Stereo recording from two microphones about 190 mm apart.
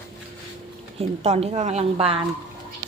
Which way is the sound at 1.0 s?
35° right (ahead or behind).